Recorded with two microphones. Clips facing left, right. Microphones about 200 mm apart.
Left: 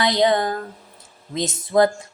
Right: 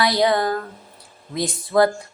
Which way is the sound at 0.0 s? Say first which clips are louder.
Even; 20° left (ahead or behind).